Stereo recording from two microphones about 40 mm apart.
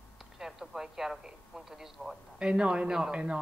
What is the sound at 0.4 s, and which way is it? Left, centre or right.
Speech, centre.